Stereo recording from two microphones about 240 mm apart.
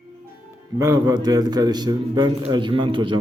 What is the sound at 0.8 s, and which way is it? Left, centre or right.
A man's voice, centre.